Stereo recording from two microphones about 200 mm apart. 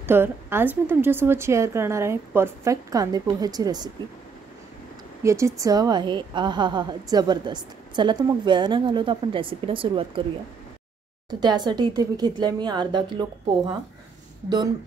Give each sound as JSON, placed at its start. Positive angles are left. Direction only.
{"t": 0.0, "sound": "a woman's voice", "side_deg": -10}
{"t": 5.2, "sound": "a woman's voice", "side_deg": -15}
{"t": 11.2, "sound": "a woman's voice", "side_deg": -20}